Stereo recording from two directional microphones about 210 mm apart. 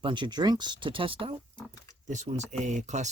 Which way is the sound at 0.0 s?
20° right (ahead or behind).